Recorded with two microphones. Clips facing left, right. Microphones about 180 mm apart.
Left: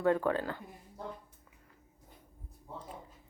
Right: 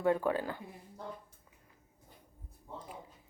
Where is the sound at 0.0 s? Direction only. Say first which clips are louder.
Left 1 dB; 15° right (ahead or behind).